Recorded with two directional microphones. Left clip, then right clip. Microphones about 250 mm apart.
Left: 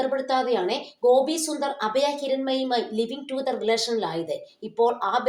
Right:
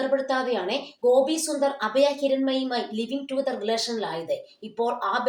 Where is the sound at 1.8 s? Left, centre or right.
Left.